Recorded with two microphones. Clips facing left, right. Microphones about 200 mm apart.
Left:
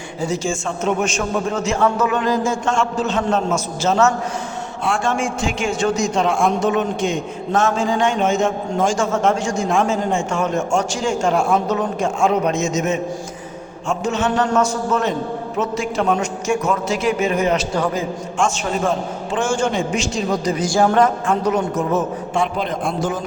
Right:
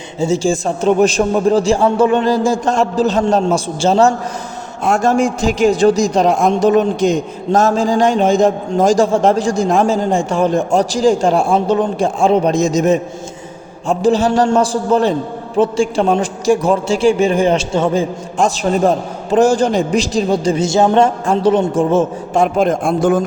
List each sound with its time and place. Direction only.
0.2 s a man's voice: 30° right (ahead or behind)
18.3 s a man's voice: 35° right (ahead or behind)
22.4 s a man's voice: 45° right (ahead or behind)